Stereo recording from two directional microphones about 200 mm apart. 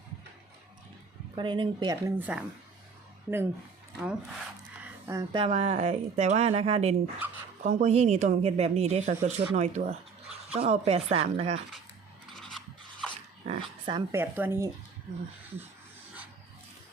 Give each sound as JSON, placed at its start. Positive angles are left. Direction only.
{"t": 1.4, "sound": "speech", "side_deg": -25}
{"t": 4.8, "sound": "a woman's voice", "side_deg": -15}
{"t": 7.2, "sound": "speech", "side_deg": -10}
{"t": 7.6, "sound": "a woman's voice", "side_deg": -35}
{"t": 12.4, "sound": "filing", "side_deg": 0}
{"t": 13.4, "sound": "speech", "side_deg": -25}
{"t": 14.2, "sound": "speech", "side_deg": -10}